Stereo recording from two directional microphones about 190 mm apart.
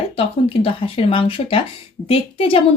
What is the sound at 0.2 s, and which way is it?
A woman's voice, 30° left (ahead or behind).